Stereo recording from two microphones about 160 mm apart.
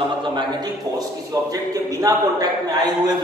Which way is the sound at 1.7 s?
20° right (ahead or behind).